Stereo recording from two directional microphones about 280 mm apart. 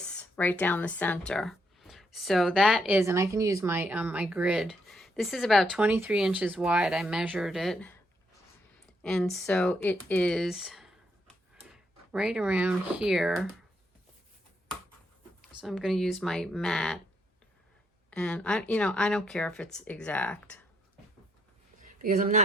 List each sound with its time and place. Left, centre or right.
0.0 s speech: centre
9.0 s speech: centre
15.6 s speech: centre
18.1 s speech: centre
22.0 s speech: right